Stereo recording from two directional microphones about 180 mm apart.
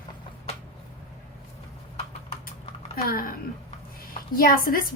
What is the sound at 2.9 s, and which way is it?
A woman's voice, 55° left (ahead or behind).